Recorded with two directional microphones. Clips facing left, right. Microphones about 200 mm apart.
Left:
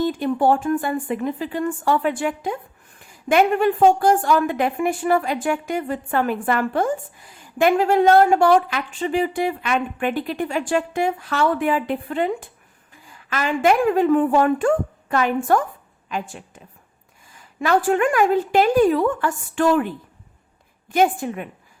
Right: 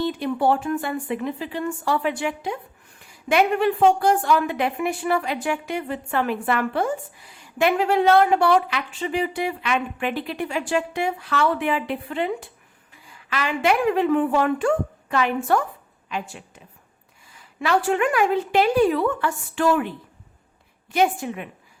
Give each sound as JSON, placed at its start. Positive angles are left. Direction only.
{"t": 0.0, "sound": "a woman's voice", "side_deg": 45}
{"t": 20.9, "sound": "a woman's voice", "side_deg": 50}